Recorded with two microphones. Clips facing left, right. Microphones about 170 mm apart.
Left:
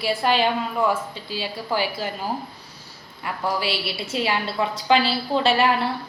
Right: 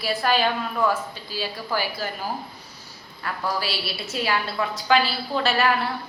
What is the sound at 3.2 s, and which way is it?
A woman's voice, 25° left (ahead or behind).